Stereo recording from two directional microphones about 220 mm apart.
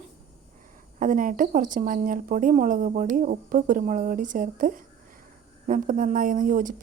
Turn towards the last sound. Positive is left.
turn(degrees=-35)  # may be behind; listen again after turning